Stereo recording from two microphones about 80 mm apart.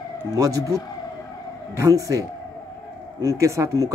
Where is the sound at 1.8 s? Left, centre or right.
Right.